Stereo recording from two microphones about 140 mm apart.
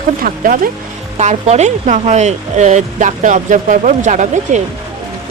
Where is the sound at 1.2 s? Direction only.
55° right (ahead or behind).